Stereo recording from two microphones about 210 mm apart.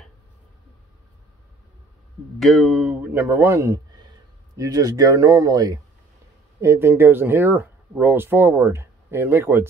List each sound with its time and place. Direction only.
2.3 s speech: centre (ahead or behind)